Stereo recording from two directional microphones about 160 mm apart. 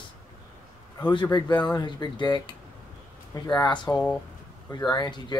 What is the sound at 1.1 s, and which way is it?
Speech, 30° left (ahead or behind).